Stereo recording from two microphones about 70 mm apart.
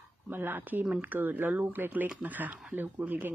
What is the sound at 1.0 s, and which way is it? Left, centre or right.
Speech, right.